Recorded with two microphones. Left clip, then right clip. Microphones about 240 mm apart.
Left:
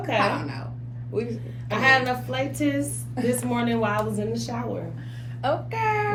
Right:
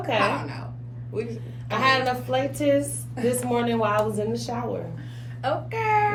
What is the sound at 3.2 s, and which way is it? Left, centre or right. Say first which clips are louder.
Speech: right 1 dB; centre.